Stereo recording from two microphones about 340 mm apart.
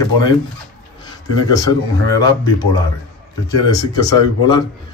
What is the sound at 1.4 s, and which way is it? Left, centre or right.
A man's voice, centre.